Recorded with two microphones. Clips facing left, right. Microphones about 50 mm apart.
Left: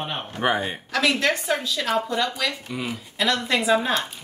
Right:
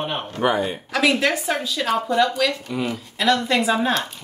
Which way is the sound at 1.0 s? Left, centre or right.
Centre.